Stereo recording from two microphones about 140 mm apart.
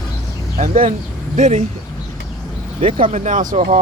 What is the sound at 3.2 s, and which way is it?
Speech, 65° right (ahead or behind).